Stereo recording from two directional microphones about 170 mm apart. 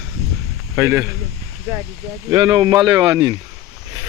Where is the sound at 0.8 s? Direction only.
15° right (ahead or behind).